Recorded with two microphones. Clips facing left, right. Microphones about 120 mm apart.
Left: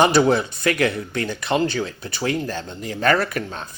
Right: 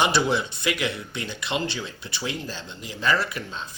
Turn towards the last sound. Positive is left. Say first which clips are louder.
# left 5 dB
turn(degrees=55)  # may be behind; listen again after turning